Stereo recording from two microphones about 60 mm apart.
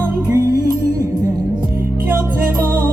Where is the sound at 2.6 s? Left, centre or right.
Right.